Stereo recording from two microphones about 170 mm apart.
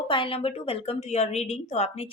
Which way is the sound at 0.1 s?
30° left (ahead or behind).